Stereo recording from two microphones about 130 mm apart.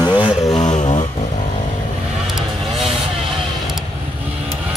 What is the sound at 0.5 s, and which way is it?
Vehicle, 60° left (ahead or behind).